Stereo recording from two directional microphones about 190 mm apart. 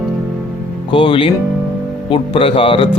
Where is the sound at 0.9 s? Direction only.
25° left (ahead or behind).